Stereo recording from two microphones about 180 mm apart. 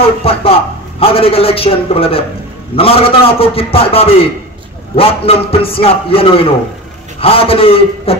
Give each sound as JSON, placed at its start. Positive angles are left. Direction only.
{"t": 0.2, "sound": "a man's voice", "side_deg": 30}